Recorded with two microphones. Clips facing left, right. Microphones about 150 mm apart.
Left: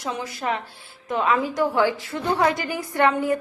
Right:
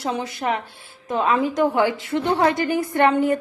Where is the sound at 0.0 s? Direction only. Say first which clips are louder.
Right 3 dB; 30° right (ahead or behind).